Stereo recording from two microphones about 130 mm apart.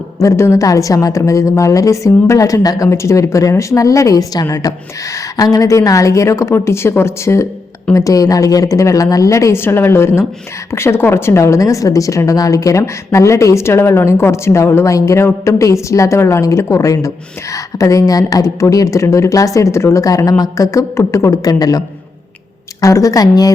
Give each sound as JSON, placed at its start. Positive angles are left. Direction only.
{"t": 0.2, "sound": "a woman's voice", "side_deg": 20}